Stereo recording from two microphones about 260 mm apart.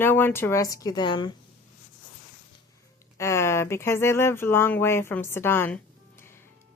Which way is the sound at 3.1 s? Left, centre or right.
Centre.